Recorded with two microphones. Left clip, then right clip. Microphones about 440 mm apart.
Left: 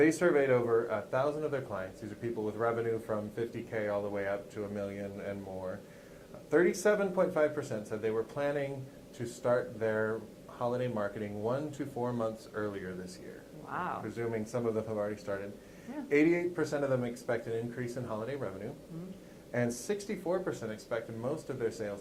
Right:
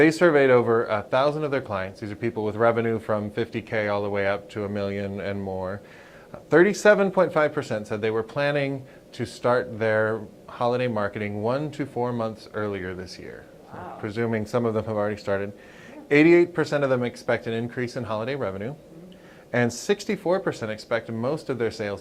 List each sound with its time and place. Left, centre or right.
0.0 s speech: right
14.2 s speech: right